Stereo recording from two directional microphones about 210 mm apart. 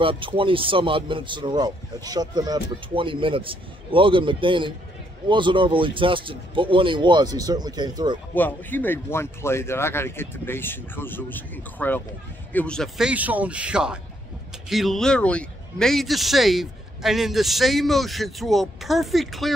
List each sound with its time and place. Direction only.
0.0 s speech: 25° right (ahead or behind)
8.4 s a man's voice: 10° left (ahead or behind)